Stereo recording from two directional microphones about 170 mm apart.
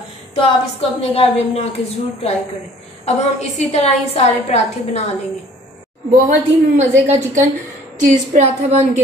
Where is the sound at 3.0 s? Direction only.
40° left (ahead or behind).